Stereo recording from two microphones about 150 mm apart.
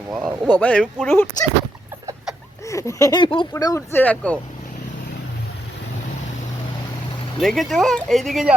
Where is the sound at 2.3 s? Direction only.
5° right (ahead or behind).